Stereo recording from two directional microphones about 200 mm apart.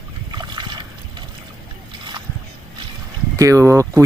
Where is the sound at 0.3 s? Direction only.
20° right (ahead or behind).